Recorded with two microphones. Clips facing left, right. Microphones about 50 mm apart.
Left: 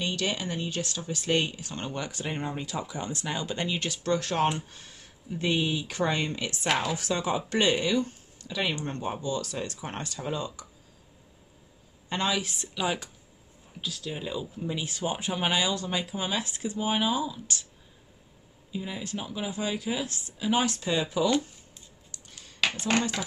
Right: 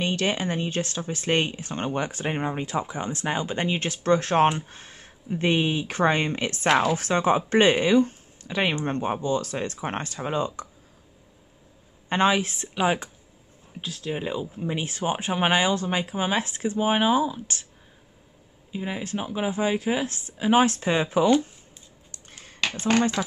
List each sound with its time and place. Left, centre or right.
0.0 s speech: right
12.1 s speech: right
18.7 s speech: right
22.1 s a sound: right